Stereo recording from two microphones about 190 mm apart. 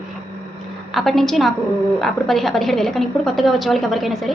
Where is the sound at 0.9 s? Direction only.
Centre (ahead or behind).